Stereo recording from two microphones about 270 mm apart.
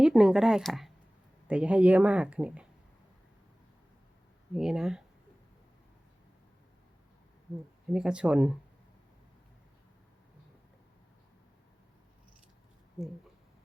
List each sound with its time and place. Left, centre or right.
0.0 s speech: centre
4.5 s speech: centre
7.9 s speech: centre